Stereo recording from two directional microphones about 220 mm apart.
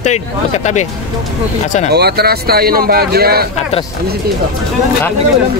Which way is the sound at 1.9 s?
45° right (ahead or behind).